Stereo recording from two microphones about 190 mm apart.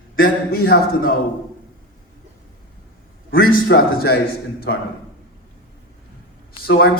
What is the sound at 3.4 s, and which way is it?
Speech, 50° left (ahead or behind).